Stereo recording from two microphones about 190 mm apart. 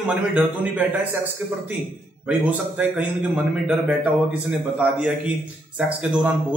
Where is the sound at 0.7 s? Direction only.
10° right (ahead or behind).